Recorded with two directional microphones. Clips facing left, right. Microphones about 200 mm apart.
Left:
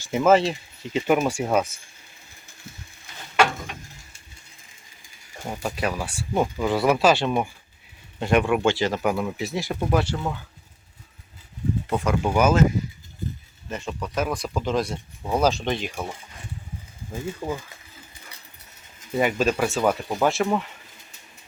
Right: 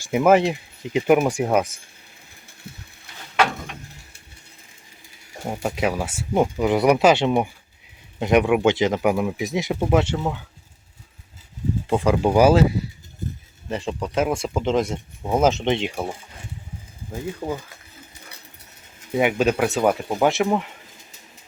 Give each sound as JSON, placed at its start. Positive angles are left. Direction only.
{"t": 0.0, "sound": "speech", "side_deg": -15}
{"t": 5.5, "sound": "speech", "side_deg": -20}
{"t": 11.9, "sound": "speech", "side_deg": -30}
{"t": 13.7, "sound": "speech", "side_deg": -30}
{"t": 17.4, "sound": "speech", "side_deg": -15}
{"t": 19.1, "sound": "speech", "side_deg": -10}